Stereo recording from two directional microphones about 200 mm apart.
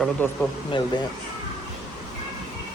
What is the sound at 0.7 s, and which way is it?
Speech, 25° left (ahead or behind).